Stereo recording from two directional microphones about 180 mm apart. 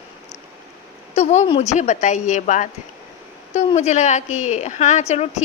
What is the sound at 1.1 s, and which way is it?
Speech, 40° left (ahead or behind).